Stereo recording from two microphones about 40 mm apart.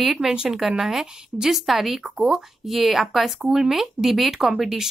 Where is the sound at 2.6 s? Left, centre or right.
Centre.